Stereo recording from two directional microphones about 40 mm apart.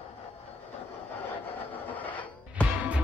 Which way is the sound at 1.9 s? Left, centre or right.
Left.